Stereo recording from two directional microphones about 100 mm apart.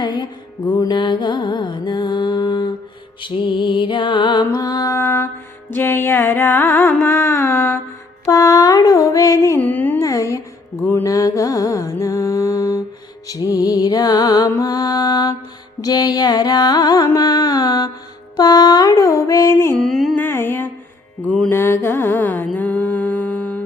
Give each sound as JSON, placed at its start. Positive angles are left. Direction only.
{"t": 0.0, "sound": "music", "side_deg": 45}
{"t": 4.5, "sound": "music", "side_deg": 40}
{"t": 8.3, "sound": "mantra", "side_deg": 35}
{"t": 9.6, "sound": "music", "side_deg": 15}
{"t": 10.0, "sound": "music", "side_deg": 30}
{"t": 19.7, "sound": "music", "side_deg": 5}
{"t": 20.1, "sound": "music", "side_deg": 20}
{"t": 21.2, "sound": "music", "side_deg": 5}
{"t": 21.5, "sound": "music", "side_deg": 25}
{"t": 22.5, "sound": "mantra", "side_deg": 15}